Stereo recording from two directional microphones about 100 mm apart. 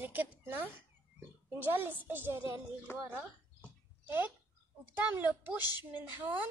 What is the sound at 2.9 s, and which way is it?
Speech, 25° left (ahead or behind).